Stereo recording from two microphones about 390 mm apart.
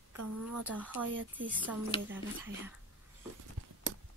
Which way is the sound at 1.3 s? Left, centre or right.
Centre.